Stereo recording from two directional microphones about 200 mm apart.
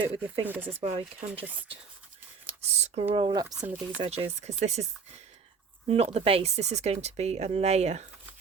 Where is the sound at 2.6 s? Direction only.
35° right (ahead or behind).